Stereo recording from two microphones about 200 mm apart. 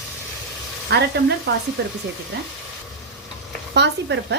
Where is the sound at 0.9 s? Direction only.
55° right (ahead or behind).